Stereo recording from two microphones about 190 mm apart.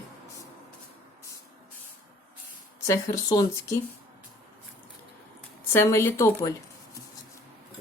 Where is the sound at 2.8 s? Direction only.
15° left (ahead or behind).